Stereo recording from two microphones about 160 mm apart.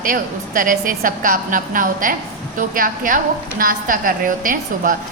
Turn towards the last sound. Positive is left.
turn(degrees=-55)  # may be behind; listen again after turning